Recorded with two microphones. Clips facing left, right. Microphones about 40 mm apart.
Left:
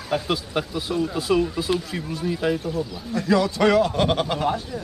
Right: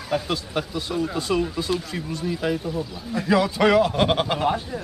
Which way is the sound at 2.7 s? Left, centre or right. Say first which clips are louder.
Left 1 dB; centre.